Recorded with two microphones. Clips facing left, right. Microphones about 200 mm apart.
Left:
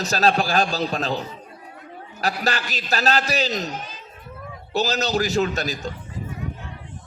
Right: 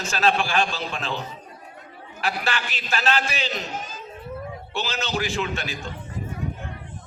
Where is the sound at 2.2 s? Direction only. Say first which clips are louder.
Left 3 dB; 40° left (ahead or behind).